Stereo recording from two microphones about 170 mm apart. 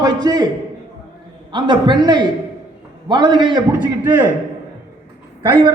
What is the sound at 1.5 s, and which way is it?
A man's voice, 25° right (ahead or behind).